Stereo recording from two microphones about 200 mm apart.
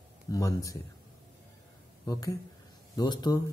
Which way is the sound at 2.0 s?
15° left (ahead or behind).